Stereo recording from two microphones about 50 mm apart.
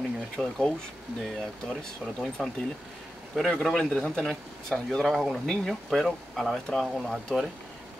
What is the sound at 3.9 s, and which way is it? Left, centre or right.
Speech, left.